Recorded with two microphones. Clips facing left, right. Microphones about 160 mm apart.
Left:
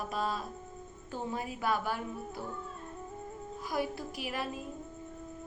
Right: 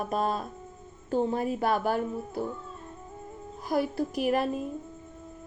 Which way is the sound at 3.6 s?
40° right (ahead or behind).